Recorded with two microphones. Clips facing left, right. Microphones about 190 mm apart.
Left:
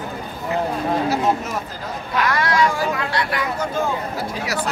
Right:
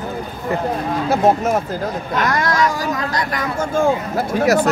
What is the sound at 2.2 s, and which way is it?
Speech, 45° right (ahead or behind).